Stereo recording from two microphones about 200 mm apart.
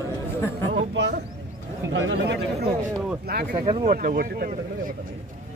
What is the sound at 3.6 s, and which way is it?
Speech, 30° right (ahead or behind).